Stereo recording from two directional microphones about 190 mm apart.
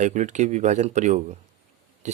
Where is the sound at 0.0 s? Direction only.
40° right (ahead or behind).